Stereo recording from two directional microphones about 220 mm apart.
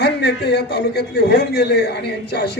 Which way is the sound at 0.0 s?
50° left (ahead or behind).